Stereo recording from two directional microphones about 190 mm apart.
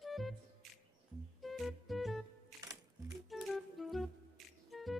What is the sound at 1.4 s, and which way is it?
Music, centre (ahead or behind).